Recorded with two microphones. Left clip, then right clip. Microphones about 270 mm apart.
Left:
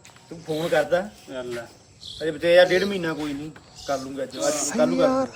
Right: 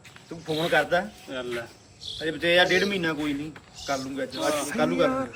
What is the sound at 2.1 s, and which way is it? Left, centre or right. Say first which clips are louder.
Speech: left 5 dB; centre.